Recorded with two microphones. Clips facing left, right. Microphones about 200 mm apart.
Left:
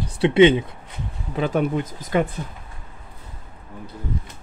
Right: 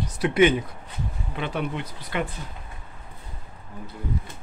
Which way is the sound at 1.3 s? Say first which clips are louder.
Left 8 dB; 40° left (ahead or behind).